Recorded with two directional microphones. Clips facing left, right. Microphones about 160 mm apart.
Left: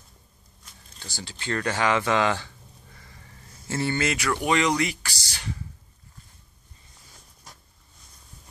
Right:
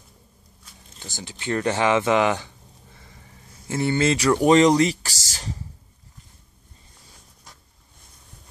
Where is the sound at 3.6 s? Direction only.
15° right (ahead or behind); by 5.6 s 40° right (ahead or behind).